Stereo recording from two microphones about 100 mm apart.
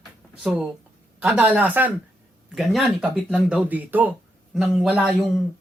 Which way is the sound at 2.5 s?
5° right (ahead or behind).